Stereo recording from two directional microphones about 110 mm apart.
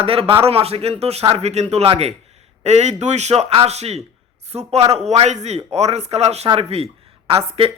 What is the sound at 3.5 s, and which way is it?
A man's voice, 70° right (ahead or behind).